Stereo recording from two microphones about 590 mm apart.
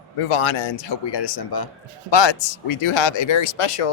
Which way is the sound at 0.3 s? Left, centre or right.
Left.